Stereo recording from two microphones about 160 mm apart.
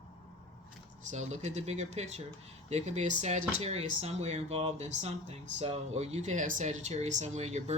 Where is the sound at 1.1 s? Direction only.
45° right (ahead or behind).